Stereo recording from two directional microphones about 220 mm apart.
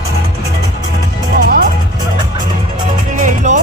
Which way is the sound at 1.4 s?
40° right (ahead or behind).